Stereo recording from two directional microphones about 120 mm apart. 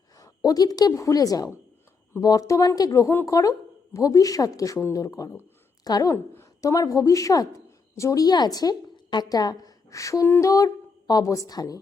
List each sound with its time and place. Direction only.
0.2 s a woman's voice: 30° left (ahead or behind)